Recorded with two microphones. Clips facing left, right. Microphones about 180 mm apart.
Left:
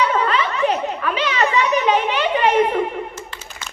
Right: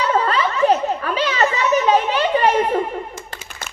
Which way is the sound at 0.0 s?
35° right (ahead or behind).